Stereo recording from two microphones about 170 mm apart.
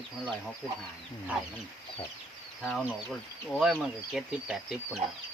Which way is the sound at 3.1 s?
Centre (ahead or behind).